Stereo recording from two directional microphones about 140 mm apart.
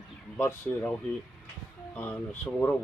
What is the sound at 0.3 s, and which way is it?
Speech, 10° left (ahead or behind).